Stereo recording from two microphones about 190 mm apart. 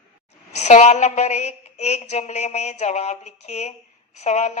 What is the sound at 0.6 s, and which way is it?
Speech, 35° left (ahead or behind).